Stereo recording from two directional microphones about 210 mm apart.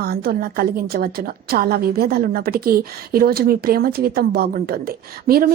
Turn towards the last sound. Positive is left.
turn(degrees=-45)  # may be behind; listen again after turning